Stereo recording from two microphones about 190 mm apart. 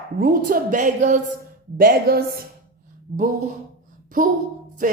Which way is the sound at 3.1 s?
50° right (ahead or behind).